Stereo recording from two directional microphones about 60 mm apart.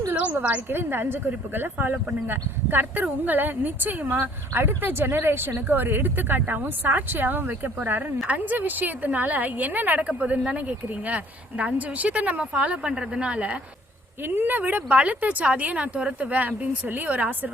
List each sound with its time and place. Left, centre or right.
0.7 s speech: right
14.2 s speech: right